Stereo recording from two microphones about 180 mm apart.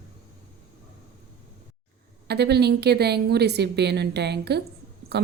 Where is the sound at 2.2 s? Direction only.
65° right (ahead or behind).